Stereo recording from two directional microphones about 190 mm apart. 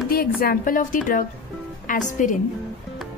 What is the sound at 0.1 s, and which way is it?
A woman's voice, 50° left (ahead or behind).